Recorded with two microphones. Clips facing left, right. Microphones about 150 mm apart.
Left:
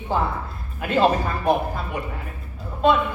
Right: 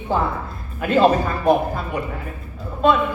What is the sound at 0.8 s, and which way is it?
Speech, 40° right (ahead or behind).